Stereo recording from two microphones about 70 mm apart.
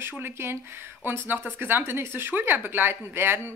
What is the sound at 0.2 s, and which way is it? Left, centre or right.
Speech, right.